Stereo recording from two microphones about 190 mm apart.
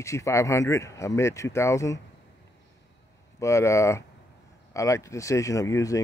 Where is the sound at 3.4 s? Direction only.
15° left (ahead or behind).